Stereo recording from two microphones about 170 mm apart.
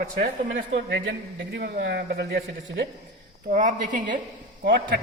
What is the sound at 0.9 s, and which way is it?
Speech, 90° right.